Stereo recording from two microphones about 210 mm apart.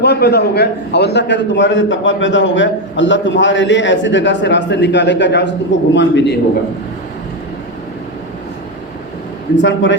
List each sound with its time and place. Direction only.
0.0 s a man's voice: 50° left (ahead or behind)
9.6 s a man's voice: 60° left (ahead or behind)